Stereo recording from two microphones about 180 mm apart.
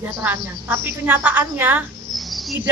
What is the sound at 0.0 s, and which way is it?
Speech, 10° right (ahead or behind).